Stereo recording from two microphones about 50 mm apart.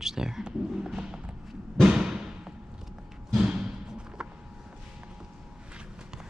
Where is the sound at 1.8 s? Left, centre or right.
Centre.